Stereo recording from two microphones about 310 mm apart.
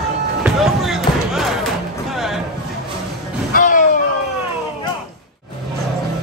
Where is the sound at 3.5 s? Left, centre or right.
Left.